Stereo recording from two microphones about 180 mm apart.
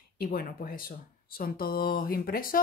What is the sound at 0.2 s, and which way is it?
Speech, 55° left (ahead or behind).